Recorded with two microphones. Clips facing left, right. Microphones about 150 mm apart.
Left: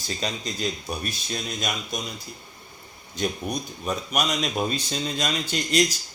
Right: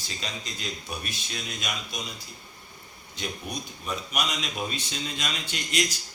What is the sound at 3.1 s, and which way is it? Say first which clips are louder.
Speech: left 7 dB; 45° left (ahead or behind).